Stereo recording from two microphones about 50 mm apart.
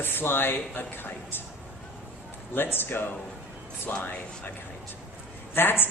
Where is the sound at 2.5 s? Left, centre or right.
Left.